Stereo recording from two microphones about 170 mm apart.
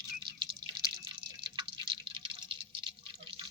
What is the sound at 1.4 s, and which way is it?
Drip, 30° right (ahead or behind).